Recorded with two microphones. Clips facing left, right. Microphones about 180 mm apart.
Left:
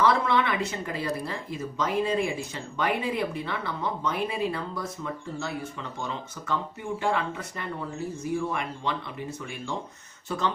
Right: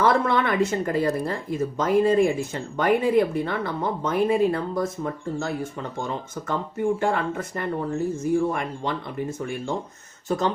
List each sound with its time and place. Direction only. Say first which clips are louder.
0.0 s speech: right 3 dB; 50° right (ahead or behind)